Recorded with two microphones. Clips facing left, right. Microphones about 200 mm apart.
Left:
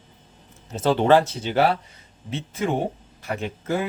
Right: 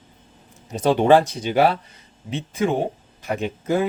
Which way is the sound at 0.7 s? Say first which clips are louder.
Right 2 dB; 15° right (ahead or behind).